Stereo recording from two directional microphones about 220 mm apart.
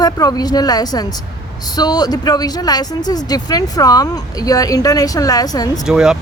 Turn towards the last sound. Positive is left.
turn(degrees=-5)  # may be behind; listen again after turning